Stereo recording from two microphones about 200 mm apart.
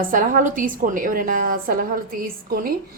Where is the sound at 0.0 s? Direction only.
45° right (ahead or behind).